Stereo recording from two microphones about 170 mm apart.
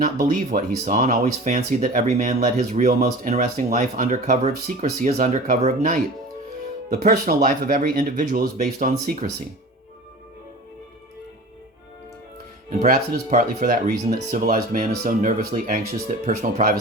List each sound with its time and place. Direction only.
0.0 s speech: 50° right (ahead or behind)
12.8 s speech: 50° right (ahead or behind)